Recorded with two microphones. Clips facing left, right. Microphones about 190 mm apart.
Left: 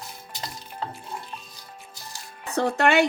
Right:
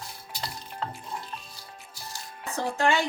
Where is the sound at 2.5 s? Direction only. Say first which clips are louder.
Left 5 dB; 70° left (ahead or behind).